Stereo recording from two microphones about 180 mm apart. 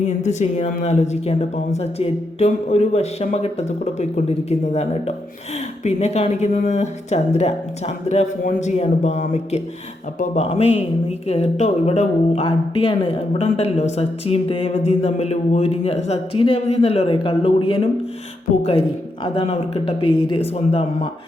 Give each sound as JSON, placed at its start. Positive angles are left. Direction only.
{"t": 0.0, "sound": "speech", "side_deg": 40}